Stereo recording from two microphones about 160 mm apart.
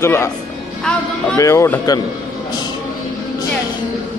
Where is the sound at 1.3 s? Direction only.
20° left (ahead or behind).